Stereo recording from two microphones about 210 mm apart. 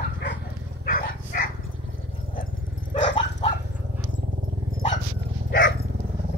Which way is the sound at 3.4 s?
30° left (ahead or behind).